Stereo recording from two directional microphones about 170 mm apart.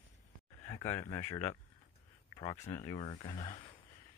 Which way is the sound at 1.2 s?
40° left (ahead or behind).